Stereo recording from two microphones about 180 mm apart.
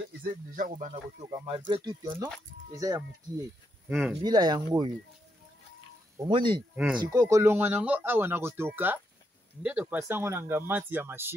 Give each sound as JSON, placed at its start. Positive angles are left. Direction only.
{"t": 0.2, "sound": "speech", "side_deg": -50}
{"t": 1.2, "sound": "speech", "side_deg": -25}
{"t": 3.9, "sound": "speech", "side_deg": 0}
{"t": 4.2, "sound": "speech", "side_deg": -20}
{"t": 6.1, "sound": "speech", "side_deg": -25}
{"t": 6.7, "sound": "speech", "side_deg": -5}
{"t": 7.0, "sound": "speech", "side_deg": -20}